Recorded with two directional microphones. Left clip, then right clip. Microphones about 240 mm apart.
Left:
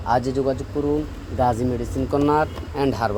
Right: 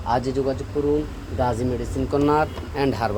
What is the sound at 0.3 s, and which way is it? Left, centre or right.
Speech, centre.